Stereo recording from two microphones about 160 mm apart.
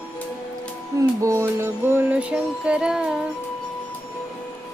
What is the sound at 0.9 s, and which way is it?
Music, 20° right (ahead or behind).